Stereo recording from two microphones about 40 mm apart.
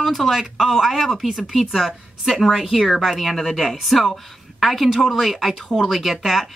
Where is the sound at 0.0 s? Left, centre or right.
Centre.